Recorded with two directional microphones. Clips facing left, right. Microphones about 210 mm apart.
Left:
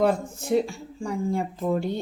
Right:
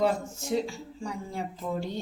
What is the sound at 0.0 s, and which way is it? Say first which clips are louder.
Speech: left 4 dB; 55° left (ahead or behind).